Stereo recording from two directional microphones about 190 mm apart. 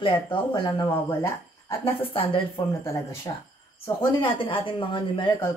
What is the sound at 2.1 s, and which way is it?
Speech, 30° left (ahead or behind).